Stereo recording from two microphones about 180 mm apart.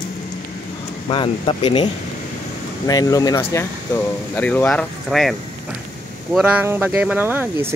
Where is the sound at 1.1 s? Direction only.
30° left (ahead or behind).